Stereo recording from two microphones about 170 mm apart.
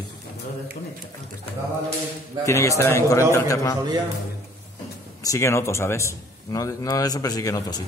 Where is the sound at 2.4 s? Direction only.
15° left (ahead or behind).